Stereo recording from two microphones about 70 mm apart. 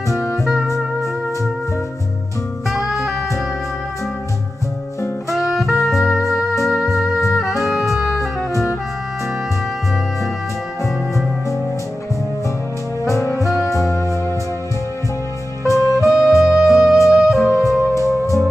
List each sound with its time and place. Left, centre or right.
0.1 s music: centre
2.7 s saxophone: centre
5.3 s music: centre
13.0 s saxophone: left
13.7 s music: left
15.7 s music: left
17.1 s music: centre
17.4 s music: left